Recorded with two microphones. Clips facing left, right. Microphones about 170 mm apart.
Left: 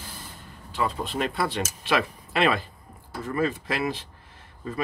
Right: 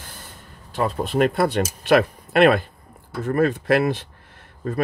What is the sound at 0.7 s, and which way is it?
Speech, 45° right (ahead or behind).